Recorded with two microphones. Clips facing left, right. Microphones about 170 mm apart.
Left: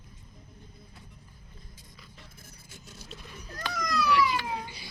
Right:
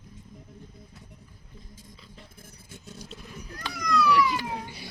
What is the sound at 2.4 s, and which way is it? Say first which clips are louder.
Vehicle: right 4 dB; 55° right (ahead or behind).